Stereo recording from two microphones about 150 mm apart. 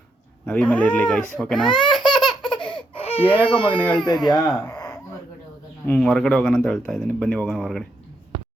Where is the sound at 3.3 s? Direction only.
35° left (ahead or behind).